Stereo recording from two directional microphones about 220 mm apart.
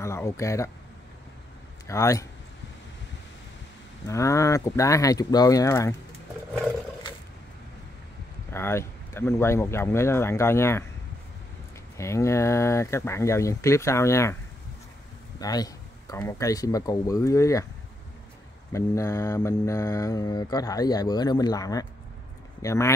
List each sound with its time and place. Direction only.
0.0 s mantra: 10° left (ahead or behind)
1.9 s mantra: 15° left (ahead or behind)
4.1 s mantra: 15° left (ahead or behind)
8.5 s mantra: 10° left (ahead or behind)
12.0 s mantra: 15° left (ahead or behind)
15.4 s mantra: 15° left (ahead or behind)
18.7 s mantra: 15° left (ahead or behind)